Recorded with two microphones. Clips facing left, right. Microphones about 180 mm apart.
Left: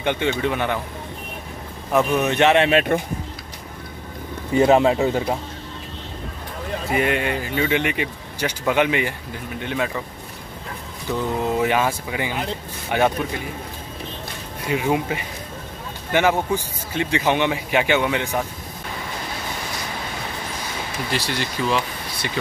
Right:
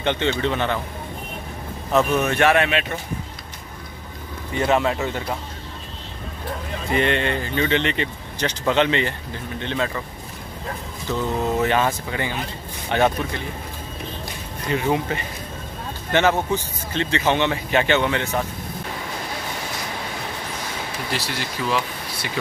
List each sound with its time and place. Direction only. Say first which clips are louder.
0.0 s a man's voice: even; 10° left (ahead or behind)
1.9 s speech: even; 15° left (ahead or behind)
2.7 s speech: left 7 dB; 50° left (ahead or behind)
4.6 s speech: left 5 dB; 30° left (ahead or behind)
6.9 s a man's voice: right 1 dB; 5° left (ahead or behind)
11.1 s a man's voice: even; 15° left (ahead or behind)
14.7 s a man's voice: even; 10° left (ahead or behind)
21.1 s speech: left 4 dB; 5° right (ahead or behind)